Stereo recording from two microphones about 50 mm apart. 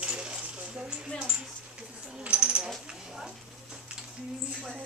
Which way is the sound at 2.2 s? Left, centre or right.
Right.